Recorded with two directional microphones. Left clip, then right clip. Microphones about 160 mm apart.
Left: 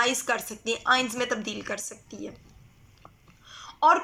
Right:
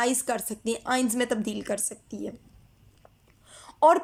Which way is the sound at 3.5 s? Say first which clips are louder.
Right 1 dB; 40° right (ahead or behind).